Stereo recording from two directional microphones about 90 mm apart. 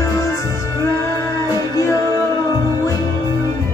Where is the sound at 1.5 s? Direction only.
35° left (ahead or behind).